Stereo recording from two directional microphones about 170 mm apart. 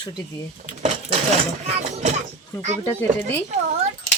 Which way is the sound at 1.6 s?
40° right (ahead or behind).